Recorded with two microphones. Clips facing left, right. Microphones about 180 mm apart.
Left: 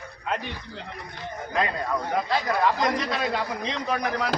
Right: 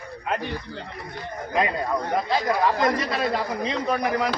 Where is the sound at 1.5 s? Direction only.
10° right (ahead or behind).